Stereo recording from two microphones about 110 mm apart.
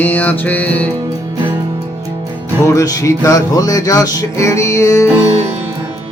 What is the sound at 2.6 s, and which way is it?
Music, 30° left (ahead or behind).